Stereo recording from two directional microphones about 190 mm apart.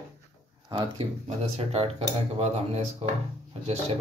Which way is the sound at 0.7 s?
30° right (ahead or behind).